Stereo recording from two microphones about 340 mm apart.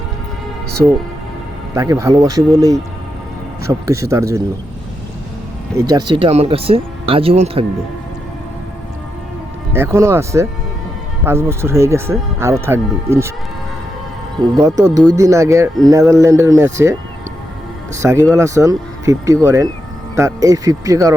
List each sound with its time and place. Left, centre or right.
1.7 s speech: centre
5.7 s speech: centre
9.7 s speech: centre
14.5 s speech: centre